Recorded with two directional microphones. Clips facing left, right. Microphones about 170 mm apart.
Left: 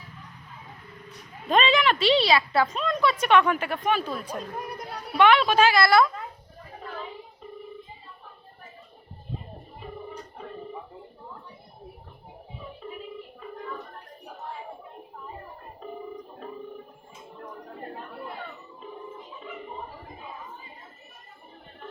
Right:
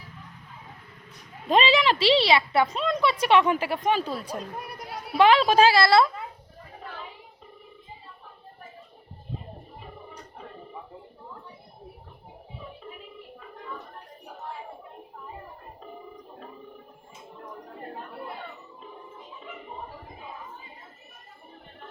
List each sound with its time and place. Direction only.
1.5 s a woman's voice: 30° right (ahead or behind)